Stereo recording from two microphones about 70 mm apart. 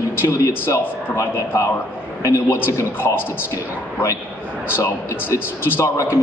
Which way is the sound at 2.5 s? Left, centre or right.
Left.